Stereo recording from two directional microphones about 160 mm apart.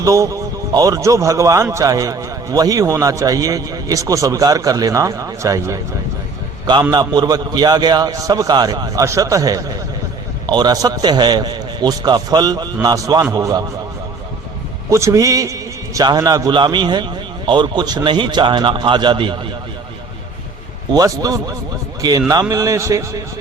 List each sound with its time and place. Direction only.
0.0 s a man's voice: 20° right (ahead or behind)
6.9 s a man's voice: 25° right (ahead or behind)
14.8 s a man's voice: 20° right (ahead or behind)
20.9 s a man's voice: 25° right (ahead or behind)